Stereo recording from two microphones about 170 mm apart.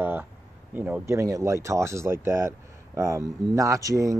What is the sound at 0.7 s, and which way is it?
Speech, 10° right (ahead or behind).